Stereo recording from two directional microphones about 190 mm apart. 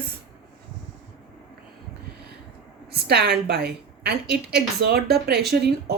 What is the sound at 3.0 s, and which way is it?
A woman's voice, 60° right (ahead or behind).